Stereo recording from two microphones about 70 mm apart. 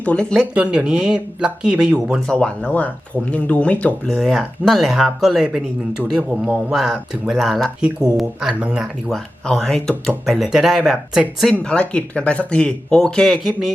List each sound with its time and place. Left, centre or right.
0.0 s speech: centre
0.5 s speech: centre
2.2 s speech: centre
4.0 s speech: centre
7.8 s speech: centre
8.8 s speech: centre
10.2 s speech: centre
11.6 s speech: centre
13.3 s speech: centre